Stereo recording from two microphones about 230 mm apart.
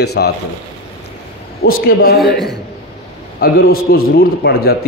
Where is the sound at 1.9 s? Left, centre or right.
Left.